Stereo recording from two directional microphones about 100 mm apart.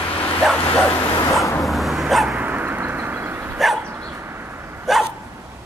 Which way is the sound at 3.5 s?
Centre (ahead or behind).